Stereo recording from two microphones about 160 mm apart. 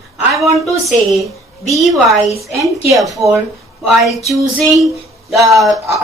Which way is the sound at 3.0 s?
20° right (ahead or behind).